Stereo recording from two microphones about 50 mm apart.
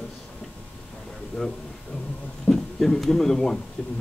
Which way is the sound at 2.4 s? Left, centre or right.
Centre.